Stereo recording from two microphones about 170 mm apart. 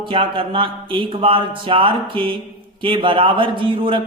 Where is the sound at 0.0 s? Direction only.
30° right (ahead or behind).